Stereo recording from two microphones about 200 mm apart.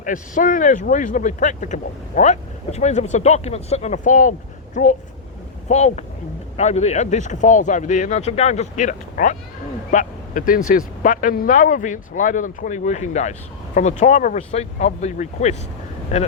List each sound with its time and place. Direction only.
0.0 s speech: 40° left (ahead or behind)